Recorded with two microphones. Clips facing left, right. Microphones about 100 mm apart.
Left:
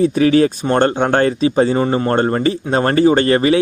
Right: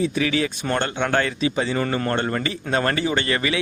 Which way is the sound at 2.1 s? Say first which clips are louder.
Left 8 dB; 35° left (ahead or behind).